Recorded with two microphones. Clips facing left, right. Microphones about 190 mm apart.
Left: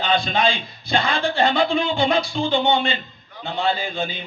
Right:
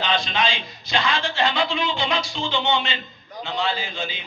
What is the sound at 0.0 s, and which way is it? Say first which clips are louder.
A man's voice: left 4 dB; 55° left (ahead or behind).